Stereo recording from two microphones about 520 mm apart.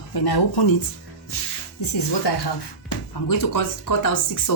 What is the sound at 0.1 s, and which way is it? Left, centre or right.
Speech, left.